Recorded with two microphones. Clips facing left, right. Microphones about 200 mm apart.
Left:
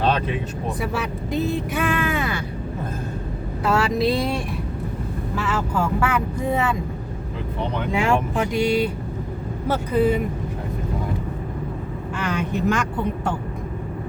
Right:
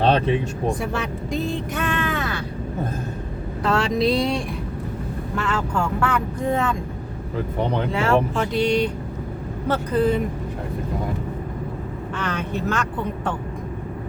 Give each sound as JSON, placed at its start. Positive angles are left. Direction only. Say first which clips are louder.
{"t": 0.0, "sound": "vehicle", "louder": "right 3 dB", "side_deg": -35}
{"t": 0.8, "sound": "speech", "louder": "even", "side_deg": 5}
{"t": 3.6, "sound": "speech", "louder": "even", "side_deg": 5}
{"t": 7.9, "sound": "speech", "louder": "even", "side_deg": 10}
{"t": 12.1, "sound": "speech", "louder": "left 2 dB", "side_deg": 10}